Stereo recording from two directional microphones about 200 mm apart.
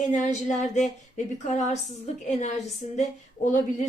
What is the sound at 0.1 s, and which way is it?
Speech, 35° left (ahead or behind).